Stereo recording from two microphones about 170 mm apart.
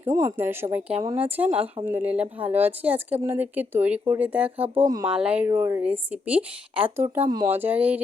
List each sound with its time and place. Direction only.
0.0 s speech: 20° right (ahead or behind)
4.8 s speech: 20° right (ahead or behind)
5.0 s speech: 5° right (ahead or behind)
5.5 s speech: 20° right (ahead or behind)